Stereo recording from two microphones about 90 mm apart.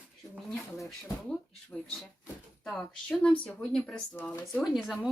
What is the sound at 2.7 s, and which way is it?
A woman's voice, 10° left (ahead or behind).